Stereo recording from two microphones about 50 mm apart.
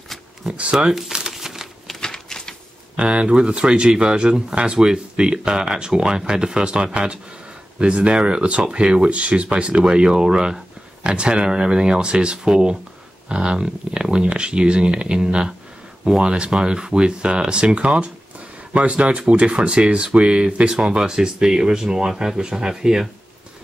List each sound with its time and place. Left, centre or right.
0.6 s speech: right
0.9 s crumpling: centre
2.0 s a sound: centre
3.0 s speech: right